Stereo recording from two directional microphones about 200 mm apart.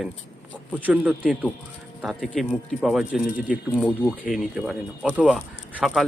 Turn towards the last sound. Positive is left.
turn(degrees=0)  # may be behind; listen again after turning